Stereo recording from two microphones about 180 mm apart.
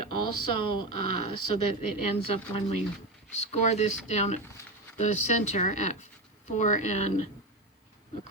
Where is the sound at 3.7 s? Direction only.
40° left (ahead or behind).